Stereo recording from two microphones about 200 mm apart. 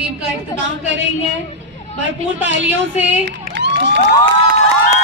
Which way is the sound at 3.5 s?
60° right (ahead or behind).